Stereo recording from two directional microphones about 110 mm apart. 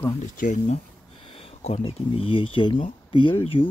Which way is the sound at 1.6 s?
65° left (ahead or behind).